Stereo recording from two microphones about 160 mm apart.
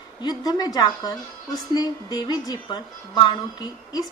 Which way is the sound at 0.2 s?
25° left (ahead or behind).